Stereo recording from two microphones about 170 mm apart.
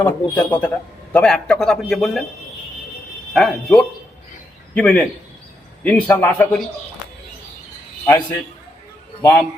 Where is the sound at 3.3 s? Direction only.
5° left (ahead or behind).